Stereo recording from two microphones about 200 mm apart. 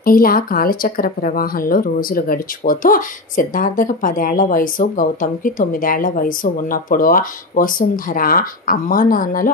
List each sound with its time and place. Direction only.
0.0 s speech: 45° left (ahead or behind)